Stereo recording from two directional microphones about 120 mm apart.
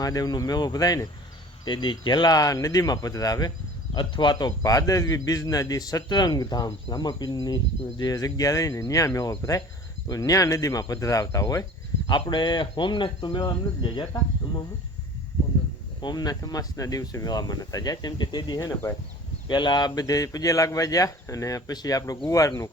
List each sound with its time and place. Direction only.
0.0 s speech: 30° left (ahead or behind)
12.3 s speech: 40° left (ahead or behind)
16.0 s speech: 35° left (ahead or behind)
19.5 s speech: 40° left (ahead or behind)